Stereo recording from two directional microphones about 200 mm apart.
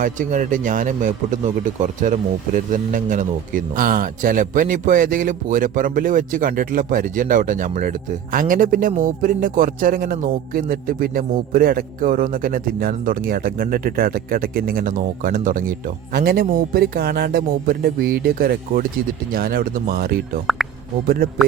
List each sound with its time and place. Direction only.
0.0 s speech: 40° right (ahead or behind)